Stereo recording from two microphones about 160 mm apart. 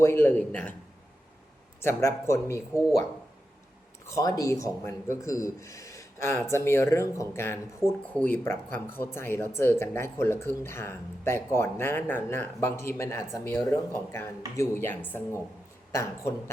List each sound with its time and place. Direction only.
0.0 s speech: 15° left (ahead or behind)
1.8 s speech: 15° left (ahead or behind)
4.0 s speech: 20° left (ahead or behind)